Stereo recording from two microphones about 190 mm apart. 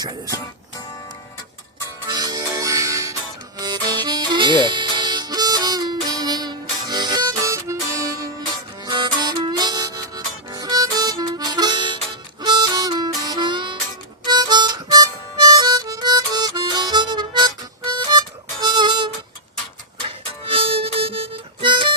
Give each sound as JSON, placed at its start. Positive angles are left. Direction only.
{"t": 2.0, "sound": "music", "side_deg": -20}
{"t": 3.6, "sound": "harmonica", "side_deg": -20}
{"t": 20.1, "sound": "music", "side_deg": -30}